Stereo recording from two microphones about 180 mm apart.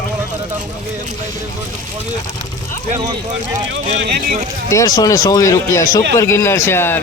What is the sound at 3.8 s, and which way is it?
Speech, 45° right (ahead or behind).